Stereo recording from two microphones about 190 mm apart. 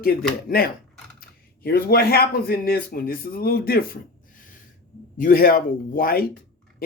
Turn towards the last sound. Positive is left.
turn(degrees=50)  # may be behind; listen again after turning